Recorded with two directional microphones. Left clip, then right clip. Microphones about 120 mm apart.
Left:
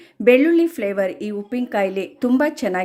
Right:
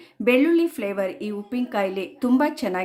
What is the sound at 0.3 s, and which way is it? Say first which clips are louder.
A woman's voice: left 5 dB; 25° left (ahead or behind).